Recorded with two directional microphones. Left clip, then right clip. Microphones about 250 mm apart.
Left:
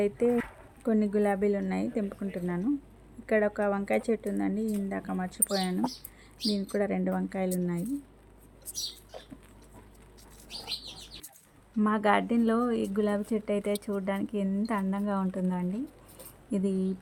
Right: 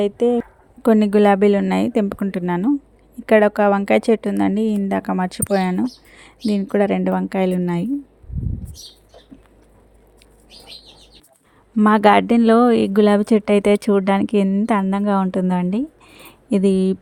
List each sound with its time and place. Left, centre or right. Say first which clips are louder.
0.0 s speech: right 9 dB; right
0.8 s speech: right 13 dB; right
11.8 s speech: right 13 dB; right